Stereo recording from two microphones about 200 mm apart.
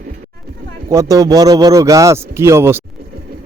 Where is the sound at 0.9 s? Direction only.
15° right (ahead or behind).